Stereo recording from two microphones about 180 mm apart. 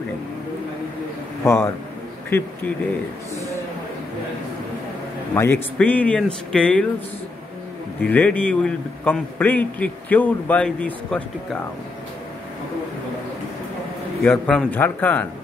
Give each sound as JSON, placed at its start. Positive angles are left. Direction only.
{"t": 1.4, "sound": "a man's voice", "side_deg": 15}
{"t": 5.3, "sound": "a man's voice", "side_deg": 10}
{"t": 8.1, "sound": "a man's voice", "side_deg": 10}
{"t": 14.2, "sound": "a man's voice", "side_deg": 5}